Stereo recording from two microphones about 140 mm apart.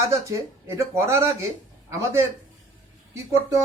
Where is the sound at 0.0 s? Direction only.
20° right (ahead or behind).